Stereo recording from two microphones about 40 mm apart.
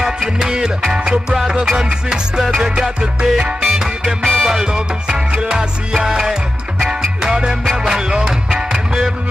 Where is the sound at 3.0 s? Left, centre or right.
Right.